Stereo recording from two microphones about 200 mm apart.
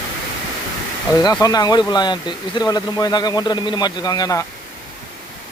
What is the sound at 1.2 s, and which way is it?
Speech, 20° left (ahead or behind).